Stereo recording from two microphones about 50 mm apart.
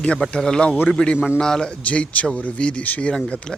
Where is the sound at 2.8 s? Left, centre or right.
Left.